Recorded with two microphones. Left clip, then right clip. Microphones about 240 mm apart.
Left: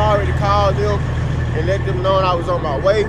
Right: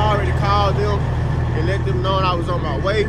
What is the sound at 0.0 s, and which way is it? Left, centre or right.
Vehicle, centre.